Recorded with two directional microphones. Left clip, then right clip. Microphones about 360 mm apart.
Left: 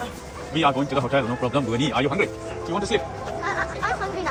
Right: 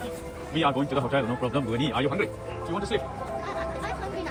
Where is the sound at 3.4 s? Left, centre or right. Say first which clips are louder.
Left 10 dB; centre.